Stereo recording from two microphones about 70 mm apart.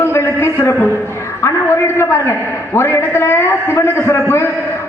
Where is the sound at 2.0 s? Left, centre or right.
Left.